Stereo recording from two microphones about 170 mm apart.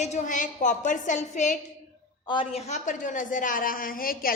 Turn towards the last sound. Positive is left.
turn(degrees=55)  # may be behind; listen again after turning